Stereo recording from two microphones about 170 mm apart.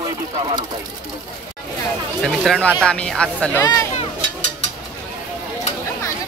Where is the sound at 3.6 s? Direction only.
20° left (ahead or behind).